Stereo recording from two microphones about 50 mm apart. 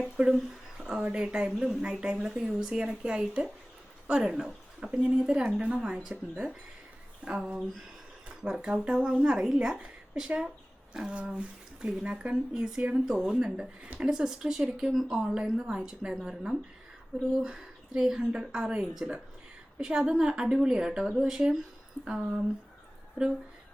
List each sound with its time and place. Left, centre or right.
0.2 s speech: centre
0.8 s a sound: centre
1.0 s a woman's voice: centre
1.5 s a woman's voice: centre
1.8 s a woman's voice: centre
4.9 s a woman's voice: right
8.6 s a woman's voice: centre
11.1 s a woman's voice: right